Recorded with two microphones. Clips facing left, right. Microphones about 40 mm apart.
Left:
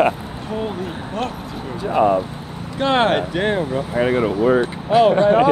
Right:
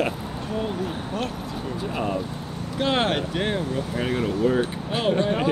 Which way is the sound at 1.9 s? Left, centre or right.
Left.